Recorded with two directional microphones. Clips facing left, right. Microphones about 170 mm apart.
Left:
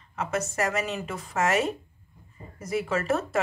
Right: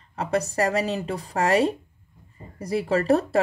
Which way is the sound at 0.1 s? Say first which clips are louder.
Right 4 dB; 35° right (ahead or behind).